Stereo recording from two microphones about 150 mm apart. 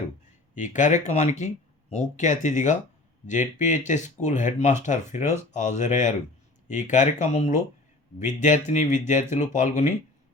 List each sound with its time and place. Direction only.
0.5 s speech: 55° left (ahead or behind)